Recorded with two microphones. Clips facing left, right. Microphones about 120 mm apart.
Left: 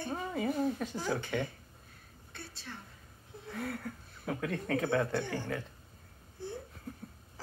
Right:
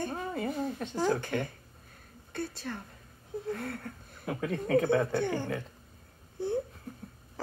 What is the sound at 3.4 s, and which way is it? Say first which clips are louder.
Speech: right 1 dB; 5° left (ahead or behind).